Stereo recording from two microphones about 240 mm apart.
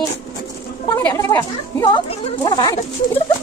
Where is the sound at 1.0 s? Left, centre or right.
Centre.